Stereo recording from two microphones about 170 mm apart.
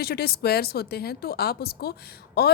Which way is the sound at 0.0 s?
65° left (ahead or behind).